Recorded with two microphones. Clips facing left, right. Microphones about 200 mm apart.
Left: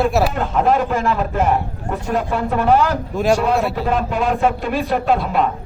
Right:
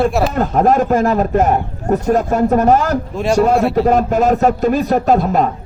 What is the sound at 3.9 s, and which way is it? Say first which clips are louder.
A man's voice: right 6 dB; 45° right (ahead or behind).